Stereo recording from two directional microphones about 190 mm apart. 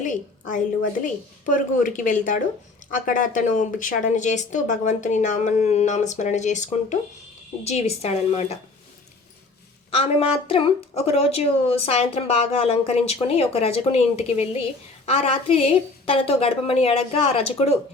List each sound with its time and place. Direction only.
0.0 s a woman's voice: 40° left (ahead or behind)
9.9 s speech: 30° left (ahead or behind)